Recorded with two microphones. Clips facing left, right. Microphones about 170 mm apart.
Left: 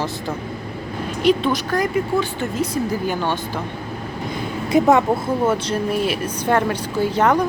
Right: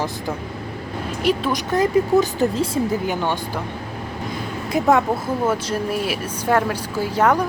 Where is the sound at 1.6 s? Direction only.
25° right (ahead or behind).